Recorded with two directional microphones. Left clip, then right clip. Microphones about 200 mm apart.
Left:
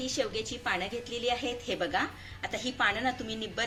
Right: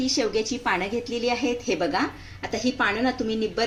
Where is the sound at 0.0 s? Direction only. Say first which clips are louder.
Right 8 dB; 35° right (ahead or behind).